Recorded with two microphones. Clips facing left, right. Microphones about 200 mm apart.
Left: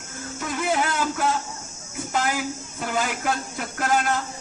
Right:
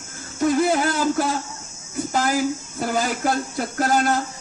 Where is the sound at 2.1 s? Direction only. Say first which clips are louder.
Right 4 dB; 35° right (ahead or behind).